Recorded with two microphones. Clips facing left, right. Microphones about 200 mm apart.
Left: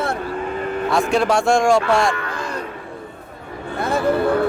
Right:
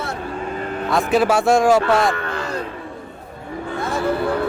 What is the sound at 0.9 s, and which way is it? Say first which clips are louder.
Speech: right 1 dB; centre (ahead or behind).